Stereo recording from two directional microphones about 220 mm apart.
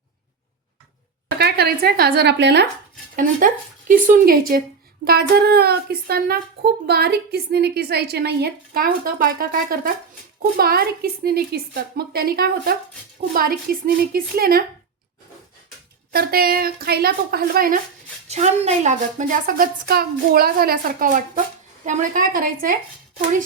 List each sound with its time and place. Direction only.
1.4 s a woman's voice: 45° right (ahead or behind)
3.2 s a woman's voice: 40° right (ahead or behind)
16.1 s a woman's voice: 45° right (ahead or behind)
18.3 s a woman's voice: 30° right (ahead or behind)